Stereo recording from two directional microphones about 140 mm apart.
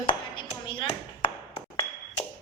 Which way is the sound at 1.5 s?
40° left (ahead or behind).